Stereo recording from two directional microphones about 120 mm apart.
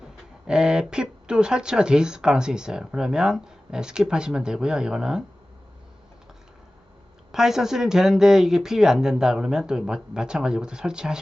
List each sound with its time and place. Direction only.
0.4 s speech: 5° right (ahead or behind)
7.3 s speech: 5° right (ahead or behind)